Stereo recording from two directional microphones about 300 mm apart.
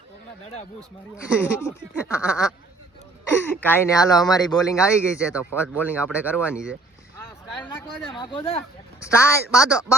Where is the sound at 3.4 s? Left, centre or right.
Centre.